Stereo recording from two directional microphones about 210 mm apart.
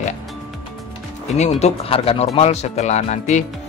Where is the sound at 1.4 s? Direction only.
30° left (ahead or behind).